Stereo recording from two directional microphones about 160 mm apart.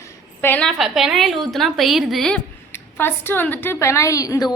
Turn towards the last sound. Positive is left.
turn(degrees=25)  # may be behind; listen again after turning